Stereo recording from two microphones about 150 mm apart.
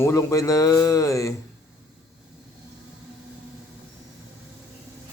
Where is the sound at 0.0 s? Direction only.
20° left (ahead or behind).